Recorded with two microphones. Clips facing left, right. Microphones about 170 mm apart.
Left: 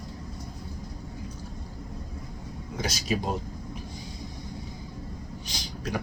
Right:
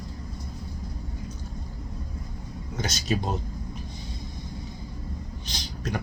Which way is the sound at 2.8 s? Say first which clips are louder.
Right 1 dB; 10° left (ahead or behind).